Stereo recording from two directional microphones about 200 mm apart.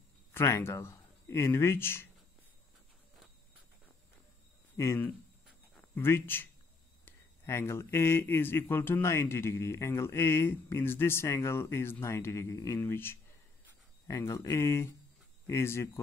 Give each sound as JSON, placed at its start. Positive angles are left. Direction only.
{"t": 0.3, "sound": "speech", "side_deg": 15}
{"t": 4.7, "sound": "speech", "side_deg": 10}